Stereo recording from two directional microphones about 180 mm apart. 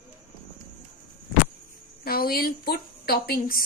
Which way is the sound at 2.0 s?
55° left (ahead or behind).